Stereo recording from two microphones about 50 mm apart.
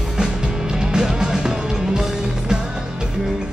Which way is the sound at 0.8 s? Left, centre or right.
Centre.